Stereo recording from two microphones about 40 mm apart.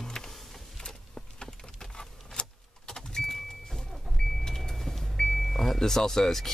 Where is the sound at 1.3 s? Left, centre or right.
Centre.